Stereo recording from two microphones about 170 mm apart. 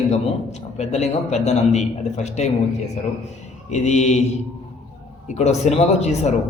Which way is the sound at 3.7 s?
40° left (ahead or behind).